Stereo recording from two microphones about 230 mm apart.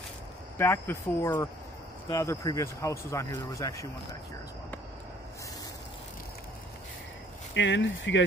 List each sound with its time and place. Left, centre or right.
0.6 s speech: centre
7.5 s speech: left